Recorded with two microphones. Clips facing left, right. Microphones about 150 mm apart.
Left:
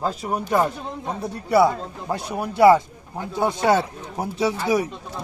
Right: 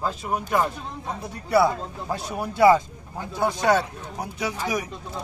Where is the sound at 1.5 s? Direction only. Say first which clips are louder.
Left 2 dB; 20° left (ahead or behind).